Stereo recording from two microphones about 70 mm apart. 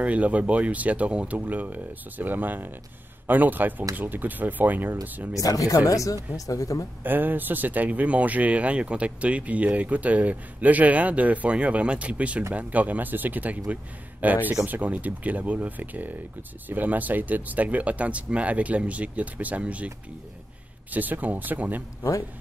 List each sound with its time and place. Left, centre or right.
0.0 s speech: centre
5.3 s speech: left
7.0 s speech: right
20.9 s speech: right